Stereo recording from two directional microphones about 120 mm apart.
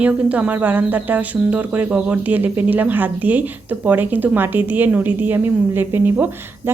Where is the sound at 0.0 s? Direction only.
10° right (ahead or behind).